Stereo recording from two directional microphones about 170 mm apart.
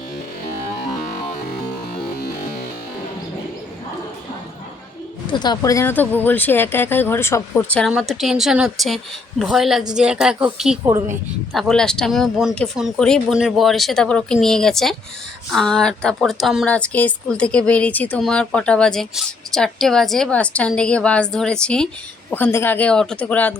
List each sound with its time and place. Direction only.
2.1 s music: 70° left (ahead or behind)
5.2 s speech: 25° left (ahead or behind); by 23.6 s 10° left (ahead or behind)